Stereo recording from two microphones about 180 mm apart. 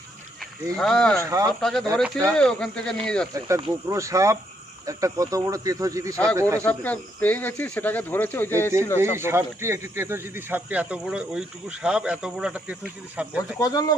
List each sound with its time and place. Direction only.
0.8 s speech: 5° left (ahead or behind)
1.2 s speech: 20° right (ahead or behind)
1.6 s speech: 5° left (ahead or behind)
3.3 s speech: 20° right (ahead or behind)
6.6 s speech: 10° left (ahead or behind)
9.0 s speech: 15° right (ahead or behind)
13.6 s speech: 20° left (ahead or behind)